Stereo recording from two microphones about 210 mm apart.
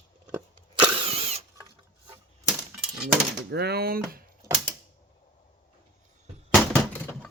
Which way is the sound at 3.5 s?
50° right (ahead or behind).